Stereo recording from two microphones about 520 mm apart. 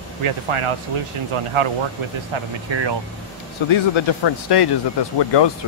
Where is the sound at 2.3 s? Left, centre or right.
Right.